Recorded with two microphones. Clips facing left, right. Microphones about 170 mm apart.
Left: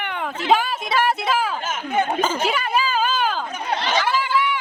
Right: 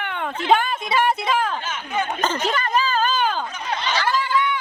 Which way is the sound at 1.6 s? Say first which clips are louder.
Left 3 dB; 45° left (ahead or behind).